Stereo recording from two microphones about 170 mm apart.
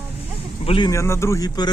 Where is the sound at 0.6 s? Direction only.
30° left (ahead or behind).